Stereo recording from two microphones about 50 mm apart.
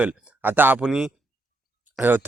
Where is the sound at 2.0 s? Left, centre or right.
Right.